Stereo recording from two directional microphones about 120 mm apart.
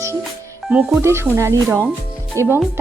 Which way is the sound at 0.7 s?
10° right (ahead or behind).